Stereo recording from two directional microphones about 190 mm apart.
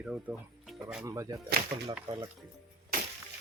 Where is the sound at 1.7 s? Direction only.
25° right (ahead or behind).